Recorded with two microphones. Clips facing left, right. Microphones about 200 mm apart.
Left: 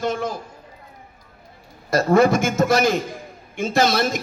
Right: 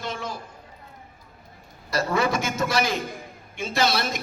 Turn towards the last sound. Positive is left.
turn(degrees=50)  # may be behind; listen again after turning